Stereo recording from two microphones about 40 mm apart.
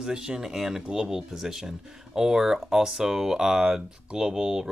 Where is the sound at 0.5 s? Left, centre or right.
Centre.